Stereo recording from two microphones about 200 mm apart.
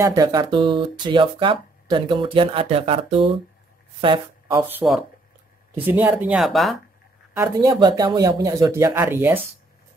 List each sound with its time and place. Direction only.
0.0 s speech: 20° right (ahead or behind)
4.6 s speech: 10° right (ahead or behind)
7.3 s speech: 15° right (ahead or behind)